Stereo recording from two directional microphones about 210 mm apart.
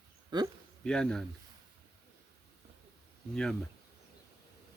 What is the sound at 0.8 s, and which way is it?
Speech, 5° left (ahead or behind).